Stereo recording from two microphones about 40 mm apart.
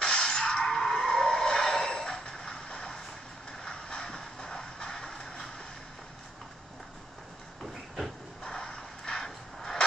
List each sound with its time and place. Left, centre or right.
0.0 s a sound: left
3.6 s music: left
8.5 s artillery fire: centre